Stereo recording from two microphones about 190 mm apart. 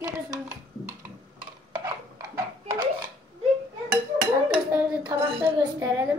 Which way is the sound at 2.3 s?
20° right (ahead or behind).